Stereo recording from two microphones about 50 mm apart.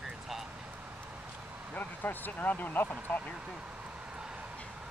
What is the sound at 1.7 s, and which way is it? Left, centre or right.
Vehicle, left.